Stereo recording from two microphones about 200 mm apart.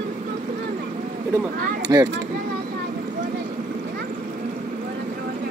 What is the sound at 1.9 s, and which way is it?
Speech, 20° right (ahead or behind).